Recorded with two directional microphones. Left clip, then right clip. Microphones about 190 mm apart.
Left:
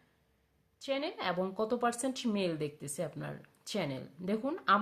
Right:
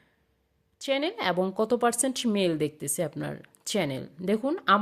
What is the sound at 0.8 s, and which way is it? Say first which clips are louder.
Speech: right 8 dB; 45° right (ahead or behind).